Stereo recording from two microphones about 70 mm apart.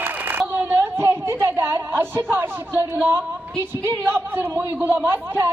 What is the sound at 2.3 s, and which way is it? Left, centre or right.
A woman's voice, right.